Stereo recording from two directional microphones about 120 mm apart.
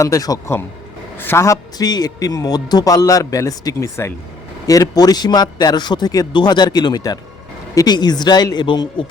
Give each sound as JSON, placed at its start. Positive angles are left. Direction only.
{"t": 0.0, "sound": "a man's voice", "side_deg": 30}